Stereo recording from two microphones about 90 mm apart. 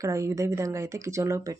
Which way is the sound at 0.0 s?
35° right (ahead or behind).